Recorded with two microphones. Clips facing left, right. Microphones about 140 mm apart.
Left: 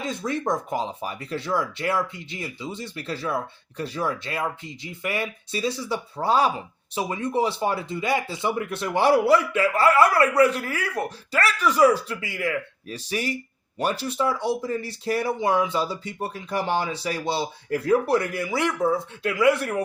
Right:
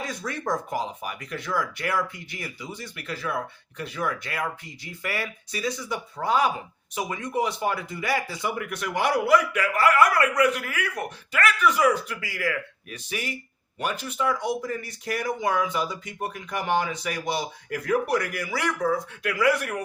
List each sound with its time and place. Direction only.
0.0 s speech: 25° left (ahead or behind)